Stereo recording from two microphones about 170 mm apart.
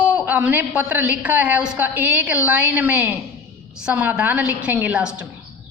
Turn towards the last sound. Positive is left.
turn(degrees=-10)  # may be behind; listen again after turning